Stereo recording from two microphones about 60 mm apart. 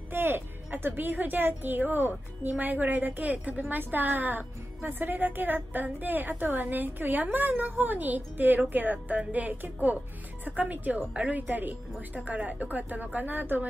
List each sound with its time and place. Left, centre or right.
0.1 s a woman's voice: right